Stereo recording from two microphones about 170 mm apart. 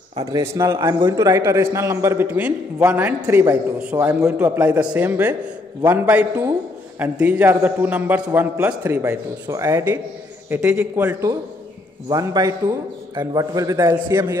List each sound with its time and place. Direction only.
0.1 s a man's voice: 20° right (ahead or behind)